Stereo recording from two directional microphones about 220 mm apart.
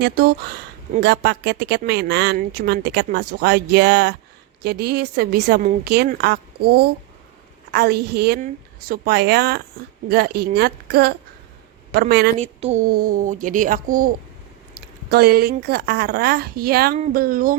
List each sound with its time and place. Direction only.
0.0 s speech: 50° right (ahead or behind)
7.7 s speech: 45° right (ahead or behind)
12.4 s a child's voice: 30° right (ahead or behind)